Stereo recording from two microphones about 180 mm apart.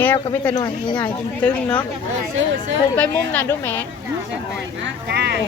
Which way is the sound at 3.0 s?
10° left (ahead or behind).